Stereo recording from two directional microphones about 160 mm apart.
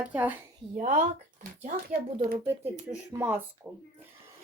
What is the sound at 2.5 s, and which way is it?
A woman's voice, 15° right (ahead or behind).